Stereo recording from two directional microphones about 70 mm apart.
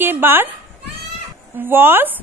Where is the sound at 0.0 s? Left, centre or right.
Right.